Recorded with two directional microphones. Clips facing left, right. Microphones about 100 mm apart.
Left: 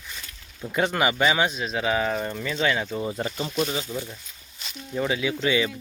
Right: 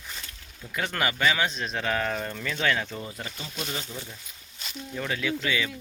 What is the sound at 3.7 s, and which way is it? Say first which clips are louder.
Speech: left 6 dB; 15° left (ahead or behind).